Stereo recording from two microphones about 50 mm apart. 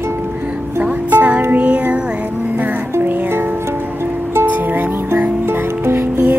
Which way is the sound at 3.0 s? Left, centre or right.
Right.